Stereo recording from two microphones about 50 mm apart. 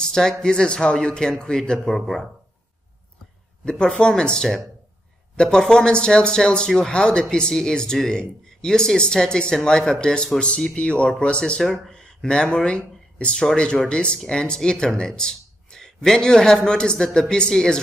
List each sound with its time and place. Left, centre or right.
0.0 s speech: centre
3.6 s speech: centre